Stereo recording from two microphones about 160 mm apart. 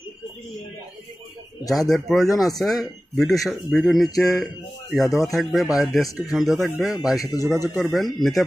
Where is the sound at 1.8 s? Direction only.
Centre (ahead or behind).